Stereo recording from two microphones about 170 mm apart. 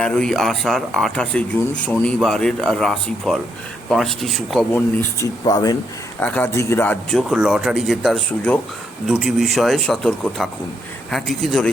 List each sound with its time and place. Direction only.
0.0 s speech: 5° left (ahead or behind)
4.7 s speech: 15° left (ahead or behind)
6.1 s a man's voice: 10° left (ahead or behind)